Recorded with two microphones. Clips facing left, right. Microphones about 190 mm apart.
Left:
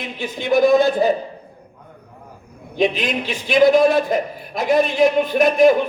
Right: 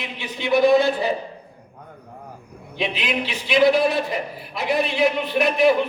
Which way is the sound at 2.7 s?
45° left (ahead or behind).